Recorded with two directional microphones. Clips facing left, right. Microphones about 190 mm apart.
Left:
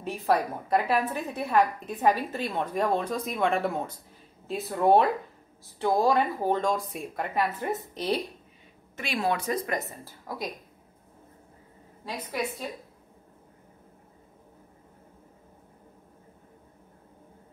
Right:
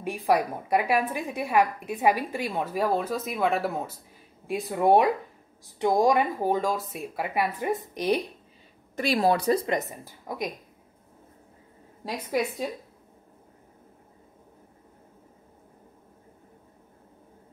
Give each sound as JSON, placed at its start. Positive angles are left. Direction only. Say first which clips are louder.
{"t": 0.0, "sound": "a woman's voice", "louder": "right 2 dB", "side_deg": -10}
{"t": 8.9, "sound": "speech", "louder": "right 5 dB", "side_deg": -35}
{"t": 9.8, "sound": "speech", "louder": "right 3 dB", "side_deg": -20}